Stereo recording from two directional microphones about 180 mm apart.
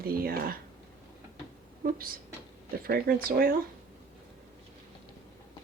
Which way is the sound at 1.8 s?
55° right (ahead or behind).